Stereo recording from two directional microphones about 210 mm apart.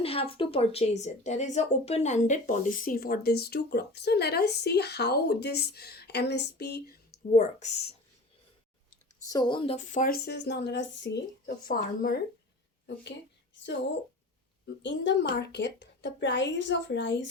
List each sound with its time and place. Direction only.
0.0 s a woman's voice: 25° left (ahead or behind); by 7.0 s 50° left (ahead or behind)
7.3 s speech: 40° left (ahead or behind)
9.3 s a woman's voice: 20° left (ahead or behind); by 12.2 s 45° left (ahead or behind)
14.8 s a woman's voice: 60° left (ahead or behind)